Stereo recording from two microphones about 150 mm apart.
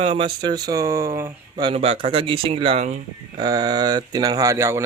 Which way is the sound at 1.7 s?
40° right (ahead or behind).